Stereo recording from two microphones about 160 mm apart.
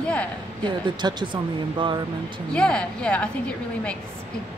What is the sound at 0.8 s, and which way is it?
Speech, 30° right (ahead or behind).